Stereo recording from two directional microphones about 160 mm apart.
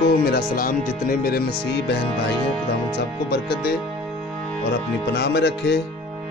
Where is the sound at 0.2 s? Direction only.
70° left (ahead or behind); by 5.8 s 90° left.